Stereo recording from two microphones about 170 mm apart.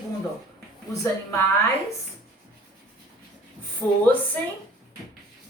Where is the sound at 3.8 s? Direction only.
5° left (ahead or behind).